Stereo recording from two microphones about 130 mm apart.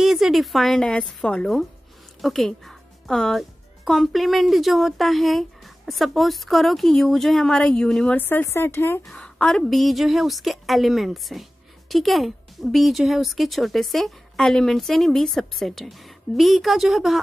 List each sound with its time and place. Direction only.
0.0 s a woman's voice: centre (ahead or behind)
8.2 s speech: 15° left (ahead or behind)
9.0 s a woman's voice: 5° left (ahead or behind)